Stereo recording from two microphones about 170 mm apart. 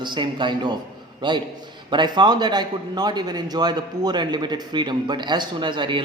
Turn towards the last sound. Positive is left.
turn(degrees=-30)  # may be behind; listen again after turning